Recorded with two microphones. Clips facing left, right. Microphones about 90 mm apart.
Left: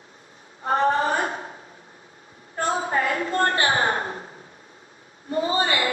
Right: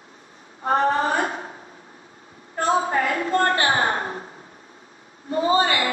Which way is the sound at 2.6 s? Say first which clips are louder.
Right 3 dB; 30° right (ahead or behind).